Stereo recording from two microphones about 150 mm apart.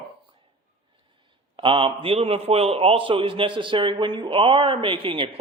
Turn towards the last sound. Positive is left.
turn(degrees=-35)  # may be behind; listen again after turning